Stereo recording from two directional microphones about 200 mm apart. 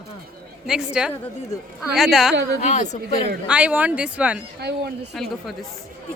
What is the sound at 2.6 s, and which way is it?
Speech, 35° left (ahead or behind).